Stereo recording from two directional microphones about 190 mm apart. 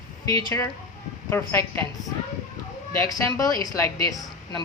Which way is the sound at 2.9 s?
15° left (ahead or behind).